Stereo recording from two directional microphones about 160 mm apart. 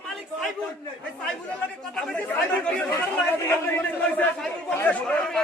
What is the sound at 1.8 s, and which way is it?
A man's voice, 5° left (ahead or behind).